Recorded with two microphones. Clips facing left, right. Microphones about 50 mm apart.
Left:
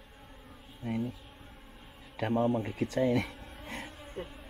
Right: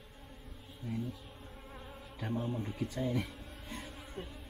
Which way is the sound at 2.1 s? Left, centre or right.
Left.